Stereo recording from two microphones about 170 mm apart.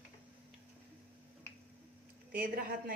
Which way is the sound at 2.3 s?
60° right (ahead or behind).